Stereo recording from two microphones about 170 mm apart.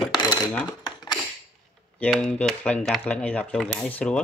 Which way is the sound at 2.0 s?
5° left (ahead or behind).